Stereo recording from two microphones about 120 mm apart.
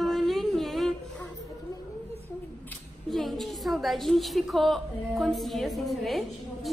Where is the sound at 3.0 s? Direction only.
Centre (ahead or behind).